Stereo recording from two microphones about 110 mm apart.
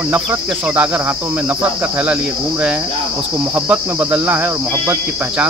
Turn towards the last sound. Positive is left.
turn(degrees=-15)  # may be behind; listen again after turning